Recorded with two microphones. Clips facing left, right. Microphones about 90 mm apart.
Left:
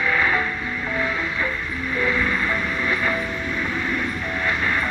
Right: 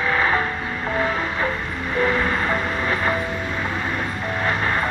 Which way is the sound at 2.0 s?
35° right (ahead or behind).